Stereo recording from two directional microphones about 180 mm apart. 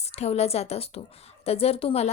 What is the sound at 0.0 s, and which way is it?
Speech, 35° left (ahead or behind).